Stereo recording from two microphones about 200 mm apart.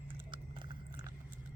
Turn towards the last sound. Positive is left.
turn(degrees=-25)  # may be behind; listen again after turning